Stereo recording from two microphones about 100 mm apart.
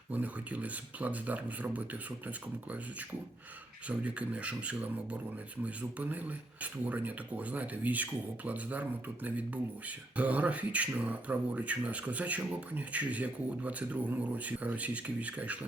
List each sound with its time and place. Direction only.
0.1 s speech: 15° right (ahead or behind)
3.8 s speech: 15° right (ahead or behind)